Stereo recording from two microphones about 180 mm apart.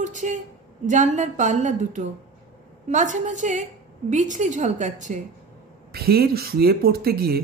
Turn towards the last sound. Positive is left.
turn(degrees=-60)  # may be behind; listen again after turning